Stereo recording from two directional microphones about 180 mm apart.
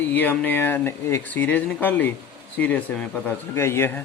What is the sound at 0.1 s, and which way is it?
Speech, 10° left (ahead or behind).